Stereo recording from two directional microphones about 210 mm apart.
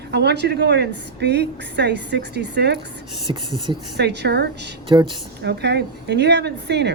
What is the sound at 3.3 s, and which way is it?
Speech, 20° right (ahead or behind).